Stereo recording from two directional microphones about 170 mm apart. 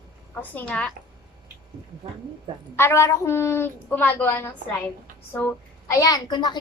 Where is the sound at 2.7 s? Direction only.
15° left (ahead or behind).